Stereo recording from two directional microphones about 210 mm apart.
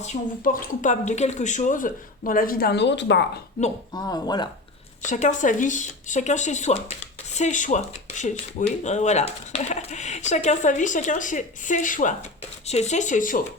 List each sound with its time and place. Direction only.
0.0 s speech: 35° left (ahead or behind); by 3.2 s 55° left (ahead or behind)
3.9 s speech: 20° left (ahead or behind)
5.0 s speech: 35° left (ahead or behind)